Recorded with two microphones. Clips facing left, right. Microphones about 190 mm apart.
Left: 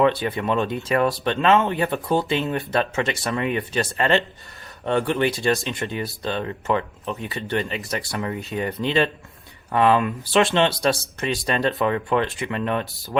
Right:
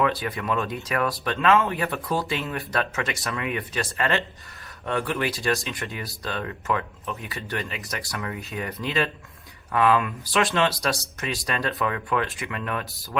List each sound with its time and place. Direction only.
0.0 s speech: 25° left (ahead or behind)